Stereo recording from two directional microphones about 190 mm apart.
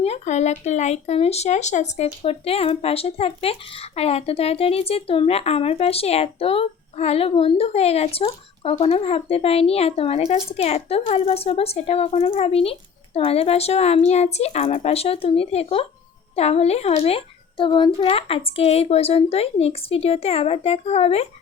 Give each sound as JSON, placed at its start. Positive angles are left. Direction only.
{"t": 0.0, "sound": "speech", "side_deg": 35}